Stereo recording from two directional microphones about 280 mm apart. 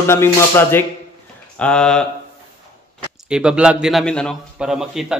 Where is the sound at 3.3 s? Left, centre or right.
Centre.